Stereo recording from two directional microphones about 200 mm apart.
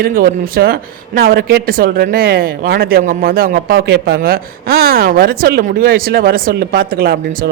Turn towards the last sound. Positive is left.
turn(degrees=-50)  # may be behind; listen again after turning